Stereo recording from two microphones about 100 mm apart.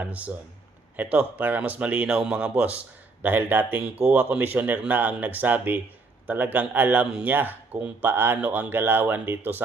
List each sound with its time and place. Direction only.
0.0 s speech: 15° right (ahead or behind)